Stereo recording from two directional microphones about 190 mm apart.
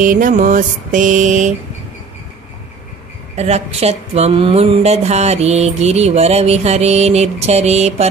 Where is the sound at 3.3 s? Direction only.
35° right (ahead or behind).